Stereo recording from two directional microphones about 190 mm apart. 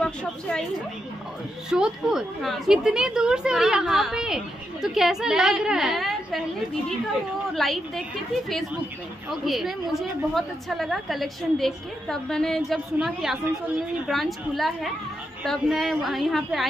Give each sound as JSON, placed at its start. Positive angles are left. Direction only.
{"t": 0.0, "sound": "a woman's voice", "side_deg": 5}
{"t": 1.7, "sound": "a woman's voice", "side_deg": -5}
{"t": 7.5, "sound": "a woman's voice", "side_deg": 0}
{"t": 9.3, "sound": "a woman's voice", "side_deg": 0}